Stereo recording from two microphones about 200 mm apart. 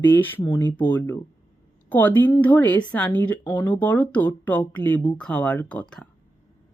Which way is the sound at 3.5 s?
20° left (ahead or behind).